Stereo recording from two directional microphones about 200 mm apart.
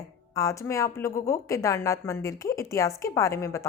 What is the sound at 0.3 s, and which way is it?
Speech, 15° left (ahead or behind).